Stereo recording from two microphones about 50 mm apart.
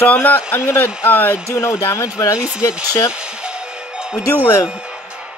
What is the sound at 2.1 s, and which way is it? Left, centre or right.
Speech, right.